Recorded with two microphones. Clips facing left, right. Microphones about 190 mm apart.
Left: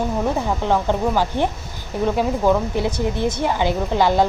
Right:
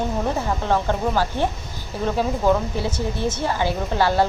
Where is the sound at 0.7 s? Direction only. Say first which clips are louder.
Left 2 dB; 15° left (ahead or behind).